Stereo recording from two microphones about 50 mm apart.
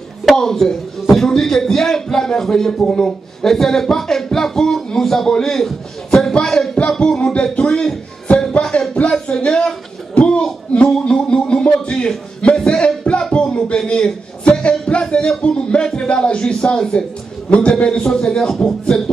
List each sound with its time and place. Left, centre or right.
0.4 s a man's voice: centre
6.3 s a sound: centre
6.9 s music: centre
7.5 s speech: left
8.4 s music: centre
8.9 s a man's voice: left; by 18.8 s centre